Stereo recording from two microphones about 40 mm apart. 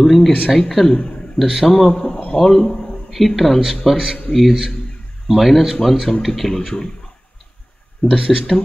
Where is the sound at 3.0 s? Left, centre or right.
Centre.